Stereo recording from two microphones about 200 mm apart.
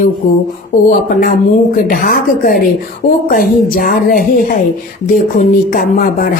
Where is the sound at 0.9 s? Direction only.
40° left (ahead or behind).